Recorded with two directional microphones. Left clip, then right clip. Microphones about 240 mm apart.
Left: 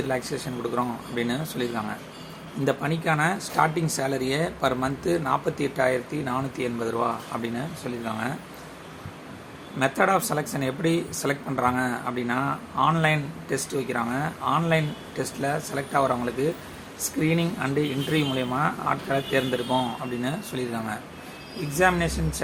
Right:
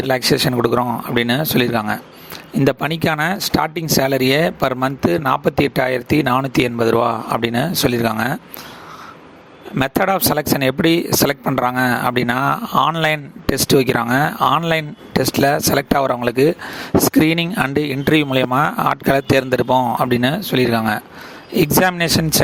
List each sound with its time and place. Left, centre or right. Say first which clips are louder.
0.1 s speech: right 13 dB; right
9.7 s a man's voice: right 5 dB; right